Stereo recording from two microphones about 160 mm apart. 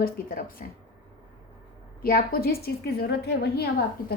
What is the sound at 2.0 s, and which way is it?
A woman's voice, 70° left (ahead or behind).